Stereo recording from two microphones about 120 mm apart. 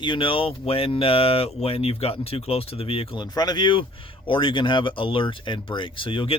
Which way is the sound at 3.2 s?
35° left (ahead or behind).